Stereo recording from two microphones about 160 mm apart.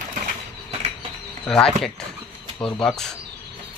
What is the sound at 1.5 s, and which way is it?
Speech, 5° left (ahead or behind).